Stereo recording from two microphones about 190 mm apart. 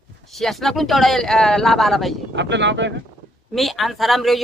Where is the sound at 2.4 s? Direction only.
70° right (ahead or behind).